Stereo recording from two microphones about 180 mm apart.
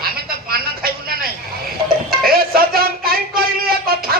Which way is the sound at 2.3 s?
55° right (ahead or behind).